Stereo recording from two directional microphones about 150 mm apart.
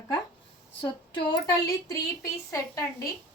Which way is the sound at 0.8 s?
35° left (ahead or behind).